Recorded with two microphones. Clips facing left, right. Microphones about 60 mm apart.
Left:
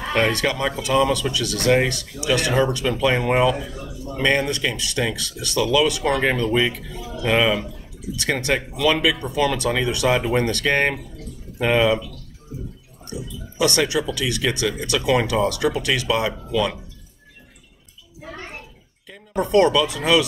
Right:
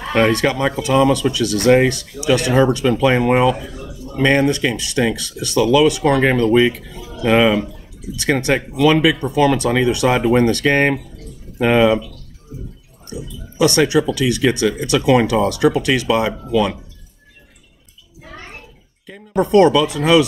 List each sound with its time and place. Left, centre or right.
0.1 s speech: right
13.6 s speech: right
19.0 s speech: right